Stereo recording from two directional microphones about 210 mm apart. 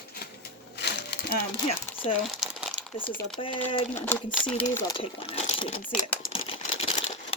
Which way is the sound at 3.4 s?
25° left (ahead or behind).